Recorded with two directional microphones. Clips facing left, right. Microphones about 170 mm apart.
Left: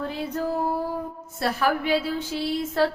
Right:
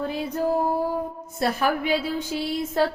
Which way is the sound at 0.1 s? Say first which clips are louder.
Right 3 dB; 15° right (ahead or behind).